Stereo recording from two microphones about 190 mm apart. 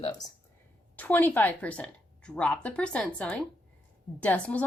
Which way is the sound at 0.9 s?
10° left (ahead or behind).